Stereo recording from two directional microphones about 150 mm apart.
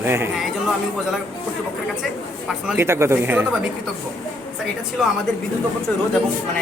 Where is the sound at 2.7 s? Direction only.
15° right (ahead or behind).